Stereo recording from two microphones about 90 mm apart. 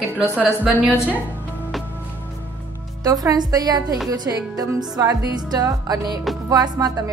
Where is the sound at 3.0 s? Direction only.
45° right (ahead or behind).